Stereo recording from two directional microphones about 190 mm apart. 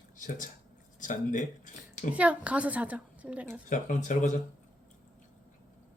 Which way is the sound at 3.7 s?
40° left (ahead or behind).